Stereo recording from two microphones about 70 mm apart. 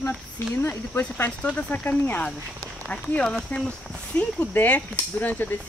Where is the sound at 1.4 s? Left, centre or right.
Centre.